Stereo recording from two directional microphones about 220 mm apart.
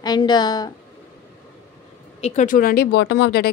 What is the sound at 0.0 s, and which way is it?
Speech, 20° left (ahead or behind).